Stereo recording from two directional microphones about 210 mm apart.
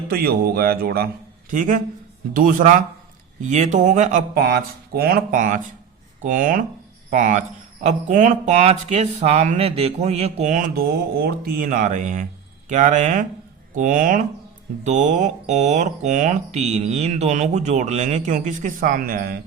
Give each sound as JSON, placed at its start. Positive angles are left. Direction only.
{"t": 0.1, "sound": "speech", "side_deg": -45}